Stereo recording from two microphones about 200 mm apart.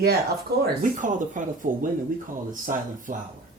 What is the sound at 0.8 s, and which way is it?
Speech, 40° right (ahead or behind).